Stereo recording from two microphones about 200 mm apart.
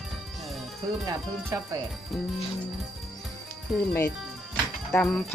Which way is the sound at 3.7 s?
Centre (ahead or behind).